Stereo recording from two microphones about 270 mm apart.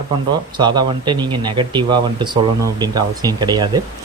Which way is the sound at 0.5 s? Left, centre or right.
Centre.